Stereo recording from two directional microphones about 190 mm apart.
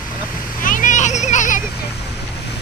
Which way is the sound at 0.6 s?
45° left (ahead or behind).